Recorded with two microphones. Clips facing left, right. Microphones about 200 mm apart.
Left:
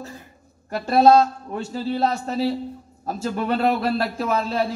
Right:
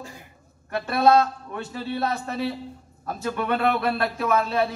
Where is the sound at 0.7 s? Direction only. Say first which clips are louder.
Left 4 dB; 30° left (ahead or behind).